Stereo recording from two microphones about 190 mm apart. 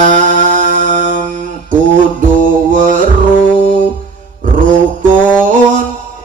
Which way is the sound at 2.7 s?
45° right (ahead or behind).